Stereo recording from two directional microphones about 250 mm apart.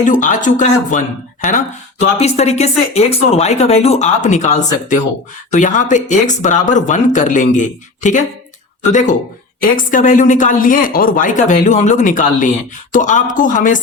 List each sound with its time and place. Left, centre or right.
0.0 s speech: left